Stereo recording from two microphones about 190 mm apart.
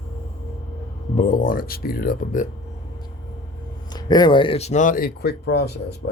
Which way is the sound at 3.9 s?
20° left (ahead or behind).